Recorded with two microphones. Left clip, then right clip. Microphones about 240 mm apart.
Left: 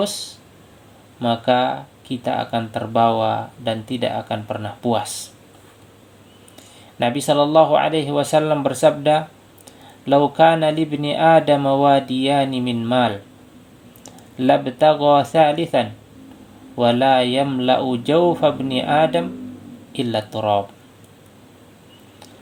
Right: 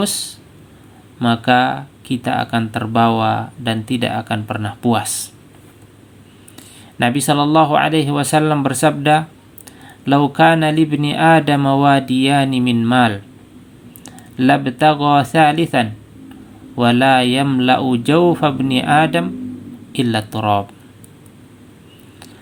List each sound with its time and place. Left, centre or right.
0.0 s speech: right
6.6 s speech: right
10.3 s speech: right
14.0 s a sound: right
15.0 s speech: right